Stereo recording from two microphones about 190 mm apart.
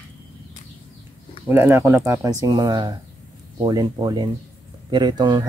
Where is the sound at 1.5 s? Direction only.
15° right (ahead or behind).